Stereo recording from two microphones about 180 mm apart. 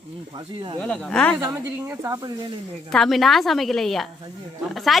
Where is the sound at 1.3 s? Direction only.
15° right (ahead or behind).